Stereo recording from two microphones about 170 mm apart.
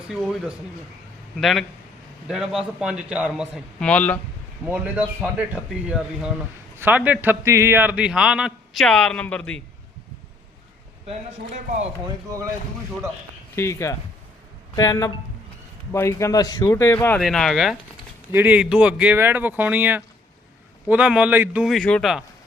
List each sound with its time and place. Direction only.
0.1 s a man's voice: centre (ahead or behind)
3.8 s speech: 10° left (ahead or behind)
4.7 s a man's voice: 5° right (ahead or behind)
11.0 s a man's voice: 40° right (ahead or behind)
13.6 s speech: 15° left (ahead or behind); by 17.7 s centre (ahead or behind)
18.3 s a man's voice: 10° right (ahead or behind)